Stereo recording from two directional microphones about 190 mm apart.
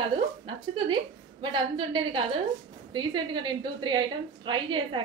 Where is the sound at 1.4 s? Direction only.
25° right (ahead or behind).